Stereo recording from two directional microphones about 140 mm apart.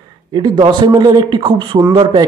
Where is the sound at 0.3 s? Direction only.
30° right (ahead or behind).